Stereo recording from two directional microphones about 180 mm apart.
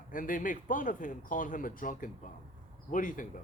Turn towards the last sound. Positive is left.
turn(degrees=45)  # may be behind; listen again after turning